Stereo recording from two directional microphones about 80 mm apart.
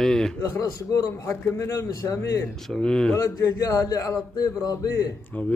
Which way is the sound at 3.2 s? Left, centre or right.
Left.